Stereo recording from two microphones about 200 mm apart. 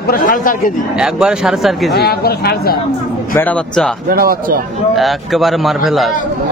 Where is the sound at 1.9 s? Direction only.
50° left (ahead or behind).